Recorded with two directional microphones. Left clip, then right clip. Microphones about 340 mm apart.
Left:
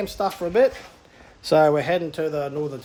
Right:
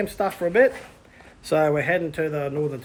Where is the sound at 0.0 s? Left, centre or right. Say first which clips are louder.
Right 1 dB; centre.